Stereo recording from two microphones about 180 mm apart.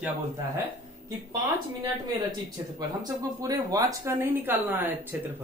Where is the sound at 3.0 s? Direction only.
20° right (ahead or behind).